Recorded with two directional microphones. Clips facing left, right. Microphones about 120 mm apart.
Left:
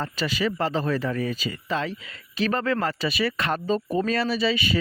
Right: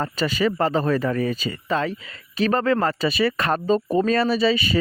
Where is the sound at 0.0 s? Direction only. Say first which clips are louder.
Right 4 dB; 40° right (ahead or behind).